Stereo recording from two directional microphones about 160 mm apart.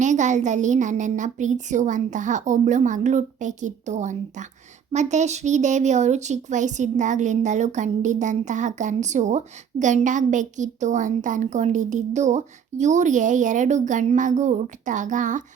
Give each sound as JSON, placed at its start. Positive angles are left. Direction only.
{"t": 0.0, "sound": "speech", "side_deg": -50}